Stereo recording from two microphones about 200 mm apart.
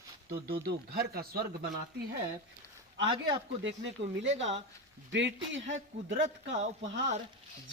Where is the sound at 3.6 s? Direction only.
65° right (ahead or behind).